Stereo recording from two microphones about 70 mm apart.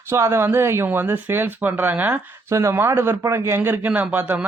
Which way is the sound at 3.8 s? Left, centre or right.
Right.